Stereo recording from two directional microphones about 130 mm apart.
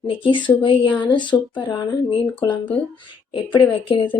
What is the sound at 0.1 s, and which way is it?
Speech, 40° left (ahead or behind).